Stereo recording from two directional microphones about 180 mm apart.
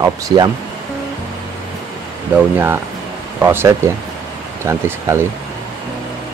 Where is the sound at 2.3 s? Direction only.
10° right (ahead or behind).